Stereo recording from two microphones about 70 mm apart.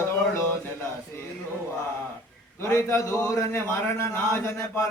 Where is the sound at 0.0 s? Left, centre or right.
Left.